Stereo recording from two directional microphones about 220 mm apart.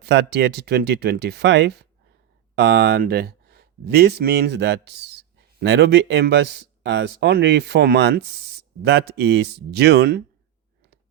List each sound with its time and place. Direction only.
0.0 s speech: 50° right (ahead or behind)